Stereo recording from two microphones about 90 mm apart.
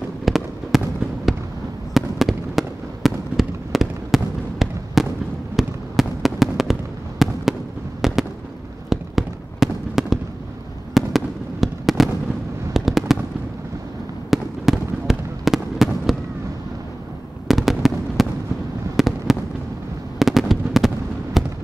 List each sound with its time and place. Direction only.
0.2 s fireworks: centre (ahead or behind)
14.3 s fireworks: 5° right (ahead or behind)
17.5 s fireworks: 5° right (ahead or behind)